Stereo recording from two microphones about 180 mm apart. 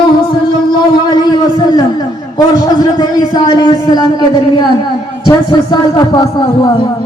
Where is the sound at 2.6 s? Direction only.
25° left (ahead or behind).